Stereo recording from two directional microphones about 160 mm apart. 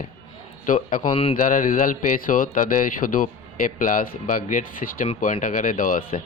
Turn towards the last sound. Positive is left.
turn(degrees=60)  # may be behind; listen again after turning